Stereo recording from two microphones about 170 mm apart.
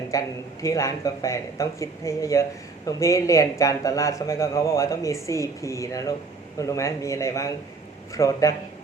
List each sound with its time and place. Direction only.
0.1 s a man's voice: 20° left (ahead or behind)